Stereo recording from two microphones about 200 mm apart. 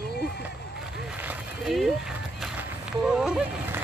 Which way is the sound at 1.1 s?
5° right (ahead or behind).